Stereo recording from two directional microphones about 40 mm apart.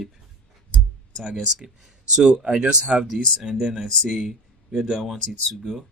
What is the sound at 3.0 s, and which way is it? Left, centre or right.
Speech, centre.